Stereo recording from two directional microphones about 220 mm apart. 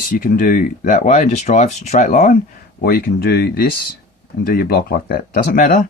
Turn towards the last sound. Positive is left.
turn(degrees=35)  # may be behind; listen again after turning